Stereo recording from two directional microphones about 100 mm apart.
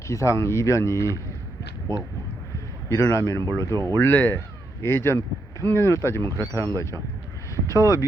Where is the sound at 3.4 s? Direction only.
45° right (ahead or behind).